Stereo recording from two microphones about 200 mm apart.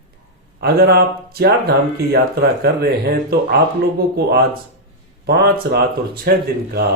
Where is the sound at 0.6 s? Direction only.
50° right (ahead or behind).